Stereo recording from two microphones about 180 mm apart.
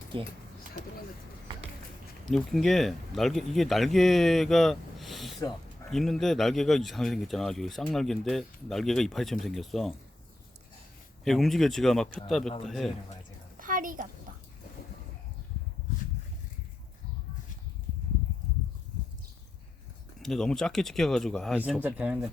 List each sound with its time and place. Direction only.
2.3 s speech: centre (ahead or behind)
11.3 s speech: centre (ahead or behind)
13.6 s a sound: 50° right (ahead or behind)
20.2 s speech: 5° left (ahead or behind)
21.8 s speech: 10° right (ahead or behind)